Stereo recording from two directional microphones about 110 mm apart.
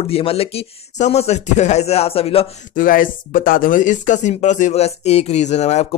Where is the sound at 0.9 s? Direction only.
80° left; by 2.4 s 60° left (ahead or behind).